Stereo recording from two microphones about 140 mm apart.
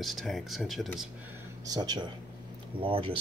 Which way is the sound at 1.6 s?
30° right (ahead or behind).